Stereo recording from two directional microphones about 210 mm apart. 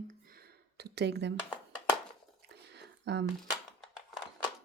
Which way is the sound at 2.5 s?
55° right (ahead or behind).